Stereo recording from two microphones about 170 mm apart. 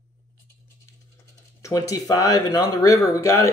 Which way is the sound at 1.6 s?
20° left (ahead or behind).